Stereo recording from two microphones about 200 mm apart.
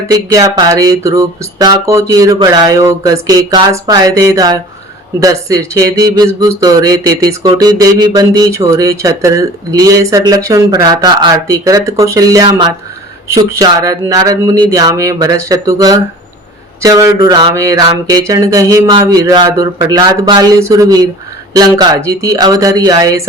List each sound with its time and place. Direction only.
0.1 s speech: 20° right (ahead or behind)